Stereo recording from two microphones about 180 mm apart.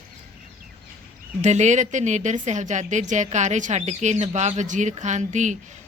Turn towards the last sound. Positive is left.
turn(degrees=-40)  # may be behind; listen again after turning